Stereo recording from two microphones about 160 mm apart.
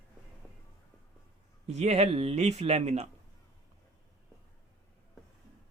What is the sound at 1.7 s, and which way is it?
A man's voice, 45° right (ahead or behind).